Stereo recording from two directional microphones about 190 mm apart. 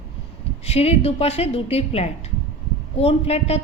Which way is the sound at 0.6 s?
35° left (ahead or behind).